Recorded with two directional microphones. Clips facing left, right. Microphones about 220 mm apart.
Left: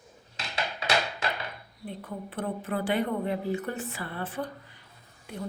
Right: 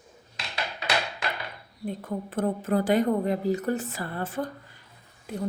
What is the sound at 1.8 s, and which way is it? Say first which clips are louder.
A woman's voice: right 6 dB; 45° right (ahead or behind).